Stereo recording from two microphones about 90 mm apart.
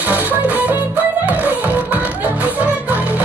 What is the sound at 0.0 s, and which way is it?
Music, 15° right (ahead or behind).